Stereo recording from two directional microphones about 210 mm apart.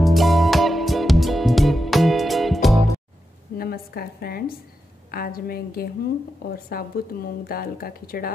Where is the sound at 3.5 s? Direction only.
45° left (ahead or behind).